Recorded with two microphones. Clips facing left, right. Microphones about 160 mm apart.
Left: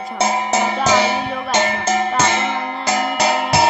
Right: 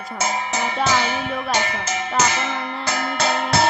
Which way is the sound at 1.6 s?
50° left (ahead or behind).